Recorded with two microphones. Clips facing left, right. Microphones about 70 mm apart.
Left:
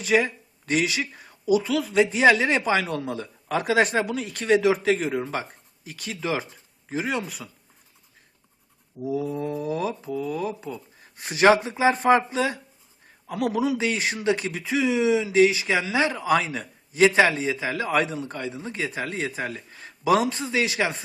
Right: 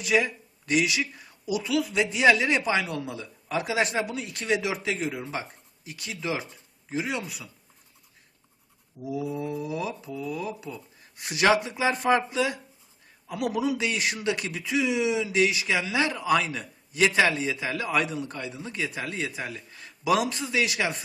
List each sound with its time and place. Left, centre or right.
0.0 s a woman's voice: left
9.0 s a woman's voice: left